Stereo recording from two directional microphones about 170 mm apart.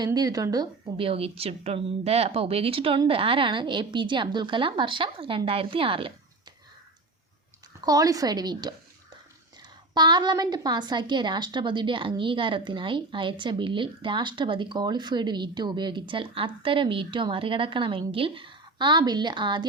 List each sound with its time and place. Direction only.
0.0 s a woman's voice: 25° right (ahead or behind)
7.9 s a woman's voice: 20° right (ahead or behind)